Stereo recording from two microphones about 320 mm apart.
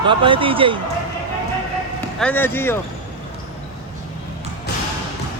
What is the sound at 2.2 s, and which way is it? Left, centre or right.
Speech, centre.